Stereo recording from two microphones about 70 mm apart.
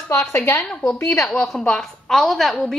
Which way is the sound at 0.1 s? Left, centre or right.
Left.